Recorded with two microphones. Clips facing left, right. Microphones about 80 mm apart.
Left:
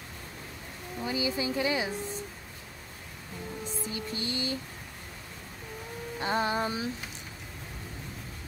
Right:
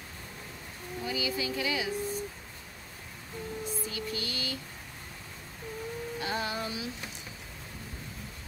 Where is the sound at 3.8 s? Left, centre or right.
Left.